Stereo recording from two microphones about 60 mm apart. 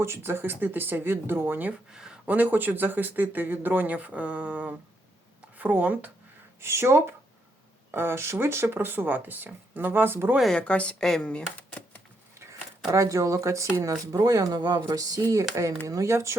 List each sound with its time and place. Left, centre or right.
0.0 s speech: right
1.9 s speech: centre
2.2 s speech: right
6.6 s speech: right
10.6 s a woman's voice: left
11.0 s speech: centre
11.3 s speech: left
12.9 s speech: right